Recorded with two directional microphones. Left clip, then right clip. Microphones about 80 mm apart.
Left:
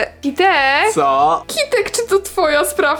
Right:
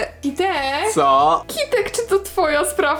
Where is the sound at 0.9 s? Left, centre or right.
Centre.